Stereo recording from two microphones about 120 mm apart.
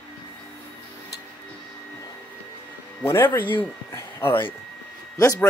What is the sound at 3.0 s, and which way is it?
Speech, 20° left (ahead or behind).